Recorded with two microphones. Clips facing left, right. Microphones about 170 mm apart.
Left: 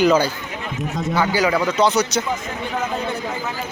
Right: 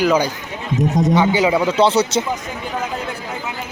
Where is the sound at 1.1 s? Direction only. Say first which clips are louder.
Right 1 dB; 20° right (ahead or behind).